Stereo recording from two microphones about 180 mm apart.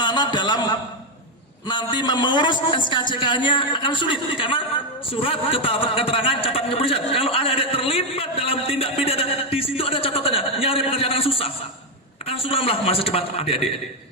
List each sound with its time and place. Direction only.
0.0 s a man's voice: 25° left (ahead or behind)